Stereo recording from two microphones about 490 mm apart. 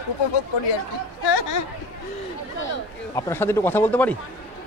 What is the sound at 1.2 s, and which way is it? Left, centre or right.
Speech, left.